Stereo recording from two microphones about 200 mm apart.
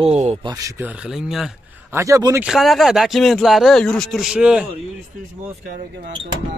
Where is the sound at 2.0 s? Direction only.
15° right (ahead or behind).